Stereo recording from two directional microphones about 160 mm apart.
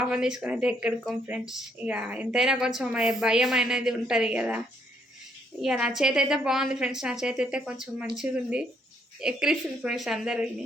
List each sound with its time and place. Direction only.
0.1 s speech: 5° right (ahead or behind)
5.6 s speech: 5° right (ahead or behind)